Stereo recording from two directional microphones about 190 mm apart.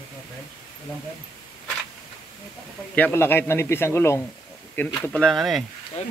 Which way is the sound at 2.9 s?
10° left (ahead or behind).